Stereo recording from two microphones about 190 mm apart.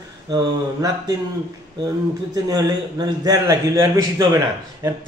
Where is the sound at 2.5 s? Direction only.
20° right (ahead or behind).